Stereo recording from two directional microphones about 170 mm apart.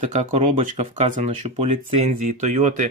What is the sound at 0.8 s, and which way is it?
Speech, 40° right (ahead or behind).